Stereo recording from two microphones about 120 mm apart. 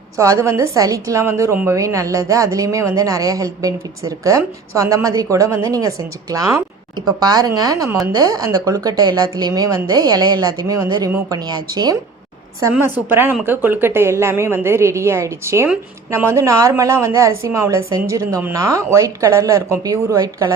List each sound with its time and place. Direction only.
0.2 s a woman's voice: 25° right (ahead or behind)
12.7 s a woman's voice: 15° right (ahead or behind)